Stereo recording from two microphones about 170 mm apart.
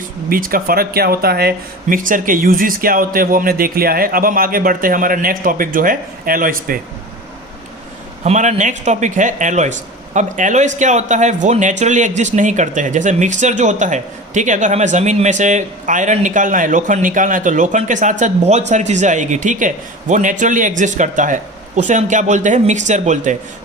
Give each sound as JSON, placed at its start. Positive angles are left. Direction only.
{"t": 0.3, "sound": "speech", "side_deg": -55}
{"t": 8.2, "sound": "speech", "side_deg": -45}